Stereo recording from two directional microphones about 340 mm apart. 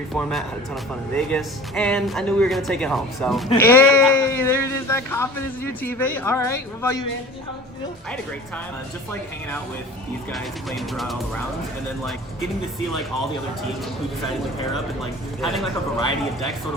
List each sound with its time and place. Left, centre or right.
0.1 s speech: centre
10.3 s speech: centre
15.4 s speech: centre